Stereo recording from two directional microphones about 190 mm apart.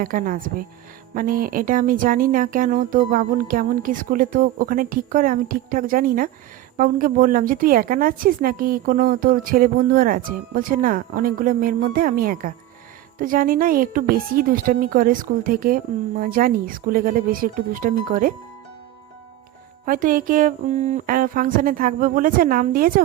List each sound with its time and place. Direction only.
0.0 s a woman's voice: 45° right (ahead or behind)
19.8 s a woman's voice: 45° right (ahead or behind)